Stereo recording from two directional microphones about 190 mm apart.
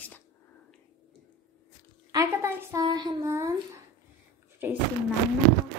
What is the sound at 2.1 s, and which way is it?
A woman's voice, 15° right (ahead or behind).